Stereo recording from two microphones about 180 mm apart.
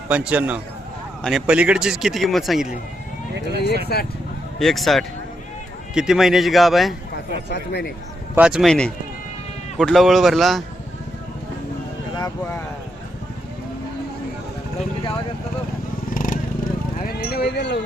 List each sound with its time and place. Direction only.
0.1 s a man's voice: 5° right (ahead or behind)
3.3 s speech: 70° right (ahead or behind)
3.9 s speech: 60° left (ahead or behind)
4.6 s a man's voice: centre (ahead or behind)
7.5 s speech: 70° left (ahead or behind)
8.4 s a man's voice: 5° right (ahead or behind)
12.1 s a sound: 20° left (ahead or behind)
16.1 s vehicle: 50° left (ahead or behind)
17.0 s a sound: 60° left (ahead or behind)